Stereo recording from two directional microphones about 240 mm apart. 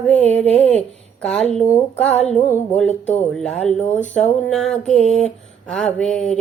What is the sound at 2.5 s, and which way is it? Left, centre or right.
Music, centre.